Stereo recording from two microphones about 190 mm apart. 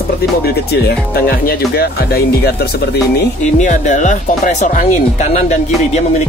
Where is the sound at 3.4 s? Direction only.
40° left (ahead or behind).